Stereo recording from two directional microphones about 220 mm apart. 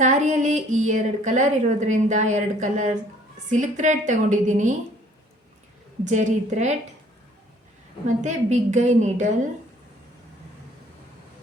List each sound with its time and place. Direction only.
0.0 s a woman's voice: 35° right (ahead or behind)
6.1 s a woman's voice: 30° right (ahead or behind)
8.0 s a woman's voice: 35° right (ahead or behind)